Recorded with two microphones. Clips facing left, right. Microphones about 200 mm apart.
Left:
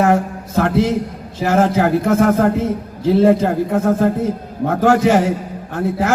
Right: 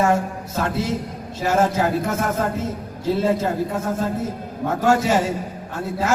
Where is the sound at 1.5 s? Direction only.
60° left (ahead or behind).